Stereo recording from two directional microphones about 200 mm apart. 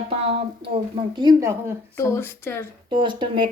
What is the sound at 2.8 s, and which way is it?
Speech, 25° right (ahead or behind).